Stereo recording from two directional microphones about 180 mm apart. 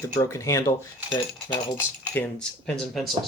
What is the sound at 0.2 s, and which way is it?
Speech, 15° left (ahead or behind).